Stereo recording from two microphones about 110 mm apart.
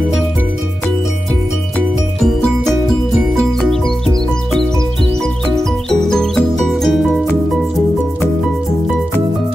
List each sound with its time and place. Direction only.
5.2 s music: 5° left (ahead or behind)